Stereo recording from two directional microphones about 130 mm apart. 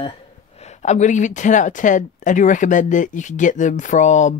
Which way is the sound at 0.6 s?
60° left (ahead or behind).